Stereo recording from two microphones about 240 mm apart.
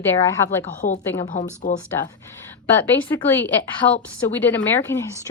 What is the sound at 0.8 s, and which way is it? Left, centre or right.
Speech, left.